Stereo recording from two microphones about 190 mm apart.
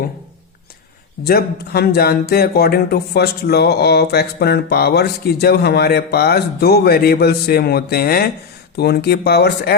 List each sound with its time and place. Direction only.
1.2 s speech: 55° left (ahead or behind)